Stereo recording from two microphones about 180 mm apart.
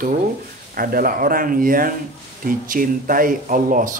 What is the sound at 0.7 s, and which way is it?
Speech, 55° right (ahead or behind).